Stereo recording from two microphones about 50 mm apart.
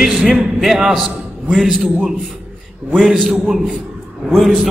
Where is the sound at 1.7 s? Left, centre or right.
Centre.